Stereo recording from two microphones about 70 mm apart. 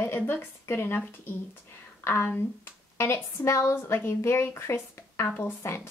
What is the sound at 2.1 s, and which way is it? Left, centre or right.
Speech, left.